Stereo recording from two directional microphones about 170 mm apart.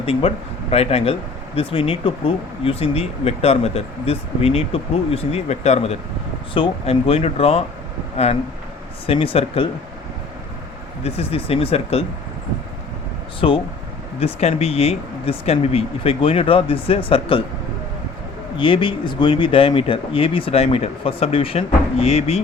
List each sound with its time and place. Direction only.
0.0 s speech: 35° left (ahead or behind)
11.0 s speech: 35° left (ahead or behind)
13.4 s speech: 35° left (ahead or behind)
18.5 s speech: 30° left (ahead or behind)